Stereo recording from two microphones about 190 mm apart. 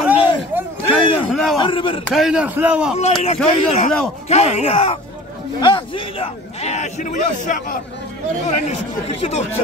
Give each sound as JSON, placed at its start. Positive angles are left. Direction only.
{"t": 0.0, "sound": "a sound", "side_deg": -10}
{"t": 1.6, "sound": "a man's voice", "side_deg": 25}
{"t": 2.0, "sound": "speech", "side_deg": 0}
{"t": 3.0, "sound": "a man's voice", "side_deg": 35}
{"t": 8.6, "sound": "a man's voice", "side_deg": 35}